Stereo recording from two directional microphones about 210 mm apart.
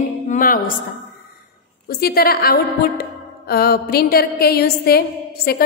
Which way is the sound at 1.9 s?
45° left (ahead or behind).